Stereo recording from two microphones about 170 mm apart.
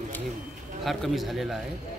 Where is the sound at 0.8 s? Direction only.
Centre (ahead or behind).